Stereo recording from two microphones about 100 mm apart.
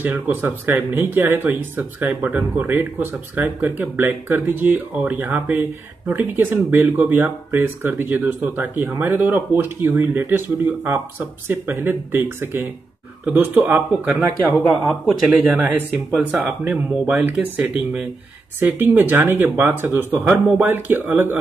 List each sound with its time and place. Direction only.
0.0 s speech: 20° right (ahead or behind)
14.5 s speech: 20° left (ahead or behind)
15.2 s speech: 15° right (ahead or behind)
16.7 s speech: 10° right (ahead or behind)